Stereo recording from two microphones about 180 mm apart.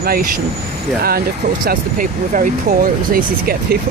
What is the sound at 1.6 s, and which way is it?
Speech, 50° right (ahead or behind).